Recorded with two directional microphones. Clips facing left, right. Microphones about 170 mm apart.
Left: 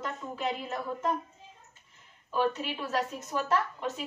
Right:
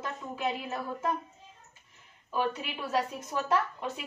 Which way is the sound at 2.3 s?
10° right (ahead or behind).